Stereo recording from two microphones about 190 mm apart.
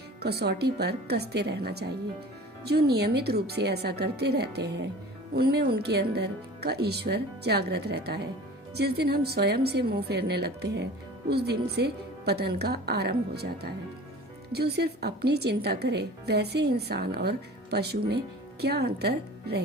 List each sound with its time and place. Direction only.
0.2 s a woman's voice: 60° right (ahead or behind)